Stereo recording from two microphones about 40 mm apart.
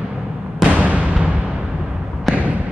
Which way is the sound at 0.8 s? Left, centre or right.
Right.